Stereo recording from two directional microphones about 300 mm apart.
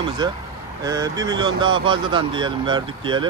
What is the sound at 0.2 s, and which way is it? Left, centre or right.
Speech, centre.